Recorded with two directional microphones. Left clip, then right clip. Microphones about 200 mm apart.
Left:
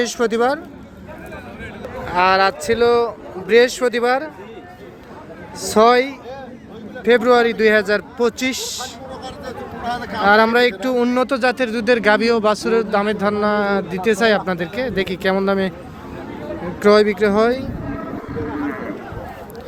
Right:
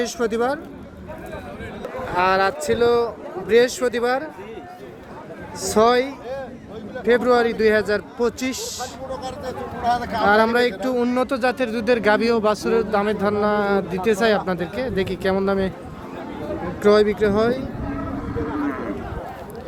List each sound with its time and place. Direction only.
0.0 s speech: 10° left (ahead or behind)
2.0 s speech: 10° left (ahead or behind)
5.6 s speech: 10° left (ahead or behind)
9.2 s a sound: 60° right (ahead or behind)
10.2 s speech: 10° left (ahead or behind)
16.8 s speech: 10° left (ahead or behind)